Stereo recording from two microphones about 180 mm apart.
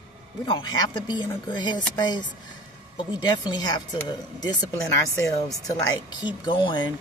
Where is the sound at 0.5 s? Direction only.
25° left (ahead or behind).